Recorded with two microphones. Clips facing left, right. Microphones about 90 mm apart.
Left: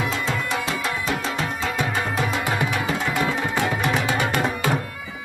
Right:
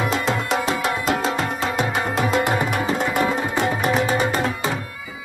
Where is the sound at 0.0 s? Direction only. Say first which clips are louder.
Right 3 dB; 60° right (ahead or behind).